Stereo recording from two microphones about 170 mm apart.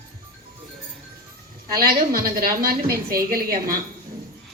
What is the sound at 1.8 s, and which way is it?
Speech, 60° right (ahead or behind).